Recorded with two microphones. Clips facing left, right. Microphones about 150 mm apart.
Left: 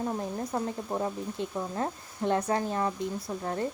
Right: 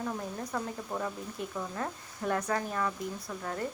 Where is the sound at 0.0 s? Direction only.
30° left (ahead or behind).